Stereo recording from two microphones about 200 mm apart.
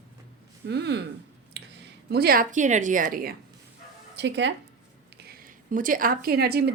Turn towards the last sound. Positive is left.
turn(degrees=-55)  # may be behind; listen again after turning